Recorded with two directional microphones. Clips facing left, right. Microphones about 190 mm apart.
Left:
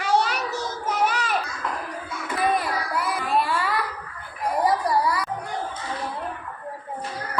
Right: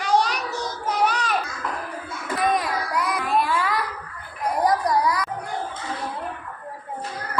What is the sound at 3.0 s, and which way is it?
Child singing, 5° left (ahead or behind).